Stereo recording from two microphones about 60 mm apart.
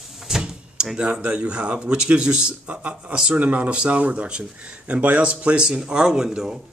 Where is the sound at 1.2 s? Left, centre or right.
Centre.